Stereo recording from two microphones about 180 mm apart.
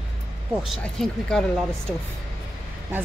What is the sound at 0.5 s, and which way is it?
Speech, centre (ahead or behind).